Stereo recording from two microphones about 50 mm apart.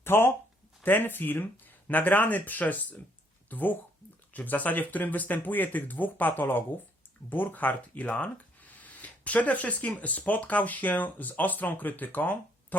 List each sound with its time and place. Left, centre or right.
0.0 s speech: left